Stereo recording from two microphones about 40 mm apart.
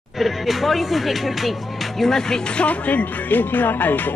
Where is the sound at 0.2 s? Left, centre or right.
Centre.